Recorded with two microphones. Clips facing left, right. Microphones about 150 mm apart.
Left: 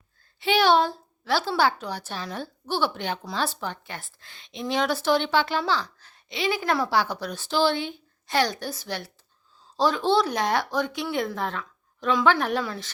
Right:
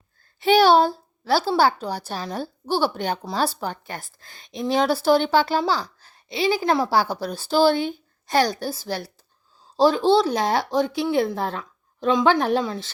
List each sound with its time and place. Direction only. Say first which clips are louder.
0.3 s a woman's voice: right 5 dB; 40° right (ahead or behind)
11.3 s a sound: right 3 dB; 35° right (ahead or behind)
12.2 s a woman's voice: right 3 dB; 30° right (ahead or behind)